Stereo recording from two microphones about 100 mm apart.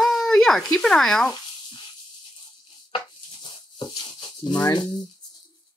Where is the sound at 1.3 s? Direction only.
50° left (ahead or behind).